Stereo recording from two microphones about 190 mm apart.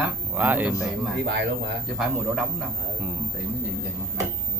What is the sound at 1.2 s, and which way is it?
Speech, 65° right (ahead or behind).